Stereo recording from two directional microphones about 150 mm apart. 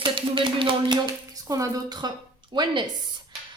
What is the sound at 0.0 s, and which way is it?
A woman's voice, 35° right (ahead or behind).